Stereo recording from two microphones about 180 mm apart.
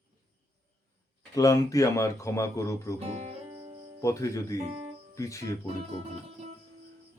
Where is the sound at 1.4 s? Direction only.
20° left (ahead or behind).